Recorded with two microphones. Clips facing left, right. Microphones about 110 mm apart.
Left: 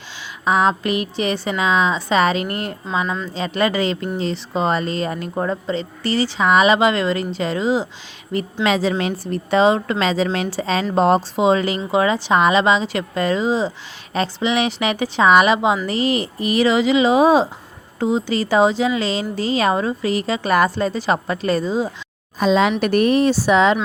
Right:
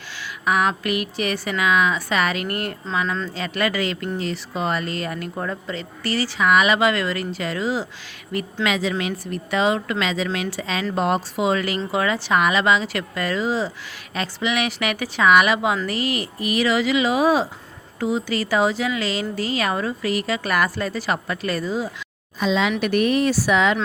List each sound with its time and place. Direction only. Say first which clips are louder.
0.4 s a woman's voice: left 4 dB; 25° left (ahead or behind)
22.4 s speech: left 5 dB; 45° left (ahead or behind)